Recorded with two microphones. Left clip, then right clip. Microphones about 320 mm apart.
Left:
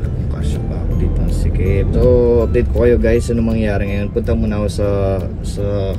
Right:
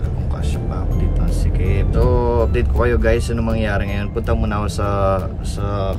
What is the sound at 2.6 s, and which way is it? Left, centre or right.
Speech, right.